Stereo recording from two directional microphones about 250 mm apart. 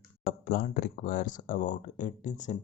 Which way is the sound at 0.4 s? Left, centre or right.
Left.